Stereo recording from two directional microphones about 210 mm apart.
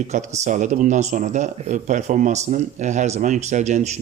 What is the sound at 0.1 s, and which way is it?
Speech, 35° right (ahead or behind).